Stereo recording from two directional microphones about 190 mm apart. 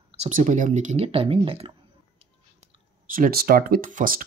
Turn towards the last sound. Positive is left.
turn(degrees=-45)  # may be behind; listen again after turning